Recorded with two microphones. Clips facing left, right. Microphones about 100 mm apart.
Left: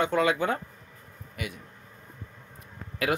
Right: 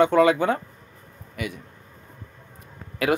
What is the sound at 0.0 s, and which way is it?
Speech, 50° right (ahead or behind).